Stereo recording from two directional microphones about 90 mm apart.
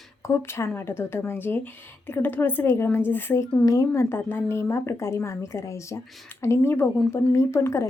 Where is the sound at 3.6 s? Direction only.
40° left (ahead or behind).